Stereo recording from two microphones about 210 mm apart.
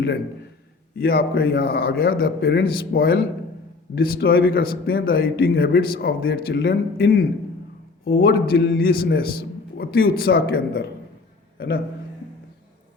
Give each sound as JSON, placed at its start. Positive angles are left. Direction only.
{"t": 0.9, "sound": "a man's voice", "side_deg": 45}